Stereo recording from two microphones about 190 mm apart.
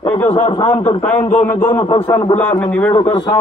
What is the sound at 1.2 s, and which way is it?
Speech, 40° left (ahead or behind).